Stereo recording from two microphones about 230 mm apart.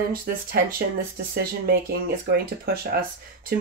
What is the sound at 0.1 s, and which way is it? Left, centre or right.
Speech, right.